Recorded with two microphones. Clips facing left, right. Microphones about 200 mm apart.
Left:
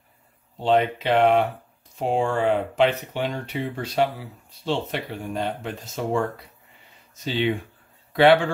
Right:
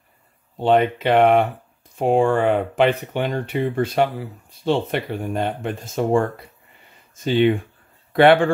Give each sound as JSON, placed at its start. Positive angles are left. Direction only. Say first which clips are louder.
{"t": 0.6, "sound": "speech", "louder": "right 3 dB", "side_deg": -55}
{"t": 7.2, "sound": "speech", "louder": "right 7 dB", "side_deg": -50}